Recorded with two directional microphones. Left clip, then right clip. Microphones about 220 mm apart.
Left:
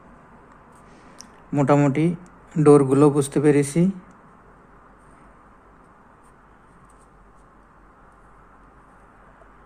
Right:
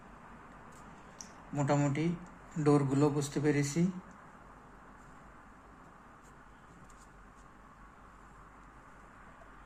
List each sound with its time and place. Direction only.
1.2 s a man's voice: 45° left (ahead or behind)